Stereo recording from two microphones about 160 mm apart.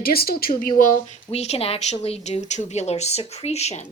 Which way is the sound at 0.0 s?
70° left (ahead or behind).